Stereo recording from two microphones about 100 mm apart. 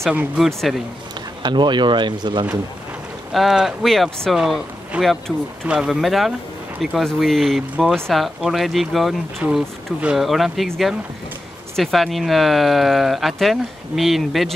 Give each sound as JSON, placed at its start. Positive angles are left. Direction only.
{"t": 0.4, "sound": "speech", "side_deg": 0}
{"t": 1.4, "sound": "speech", "side_deg": -50}
{"t": 3.3, "sound": "speech", "side_deg": -5}
{"t": 4.9, "sound": "speech", "side_deg": -10}
{"t": 5.3, "sound": "speech", "side_deg": 5}
{"t": 9.4, "sound": "speech", "side_deg": -10}
{"t": 11.7, "sound": "speech", "side_deg": 0}